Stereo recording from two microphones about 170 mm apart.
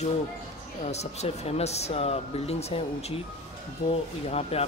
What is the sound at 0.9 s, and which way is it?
Speech, 40° left (ahead or behind).